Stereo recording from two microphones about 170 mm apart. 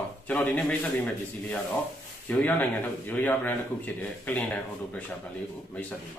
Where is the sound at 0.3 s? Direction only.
10° left (ahead or behind).